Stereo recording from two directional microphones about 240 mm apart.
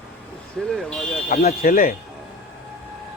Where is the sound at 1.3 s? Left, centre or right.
Left.